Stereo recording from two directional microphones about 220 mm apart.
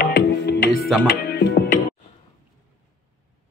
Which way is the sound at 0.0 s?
45° left (ahead or behind).